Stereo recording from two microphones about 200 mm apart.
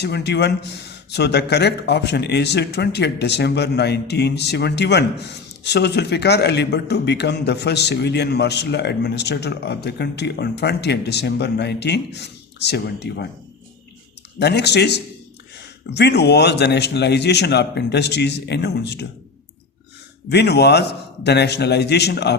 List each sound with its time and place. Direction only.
0.0 s a man's voice: 55° left (ahead or behind)
14.3 s a man's voice: 55° left (ahead or behind)
20.3 s a man's voice: 55° left (ahead or behind)